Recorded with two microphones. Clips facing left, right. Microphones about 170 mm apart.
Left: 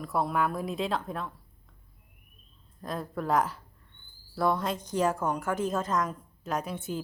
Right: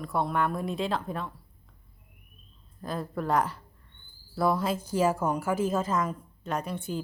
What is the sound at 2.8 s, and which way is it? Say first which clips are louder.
A woman's voice: right 1 dB; centre (ahead or behind).